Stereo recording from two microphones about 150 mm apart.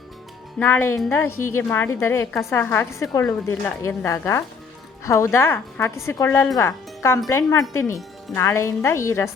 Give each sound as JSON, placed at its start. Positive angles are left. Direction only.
{"t": 0.6, "sound": "a woman's voice", "side_deg": 15}